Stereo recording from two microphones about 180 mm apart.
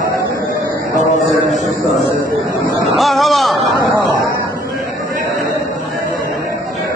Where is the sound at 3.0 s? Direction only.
Centre (ahead or behind).